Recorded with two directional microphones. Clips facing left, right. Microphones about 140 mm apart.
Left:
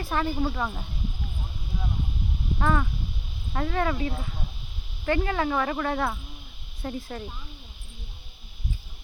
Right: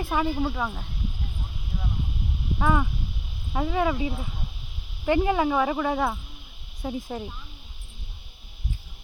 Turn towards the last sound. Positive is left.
turn(degrees=-15)  # may be behind; listen again after turning